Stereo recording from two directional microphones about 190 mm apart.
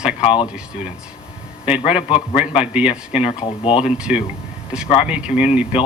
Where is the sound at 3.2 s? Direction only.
30° left (ahead or behind).